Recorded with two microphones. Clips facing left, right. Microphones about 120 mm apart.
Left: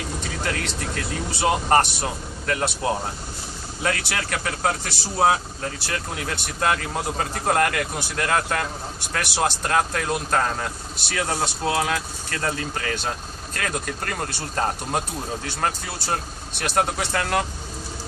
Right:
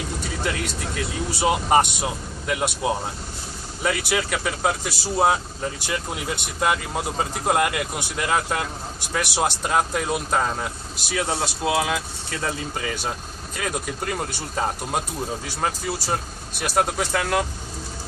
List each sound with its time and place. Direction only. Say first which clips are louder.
0.2 s speech: right 1 dB; 5° right (ahead or behind)